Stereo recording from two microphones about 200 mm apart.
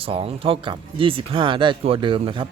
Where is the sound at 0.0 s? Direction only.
30° right (ahead or behind).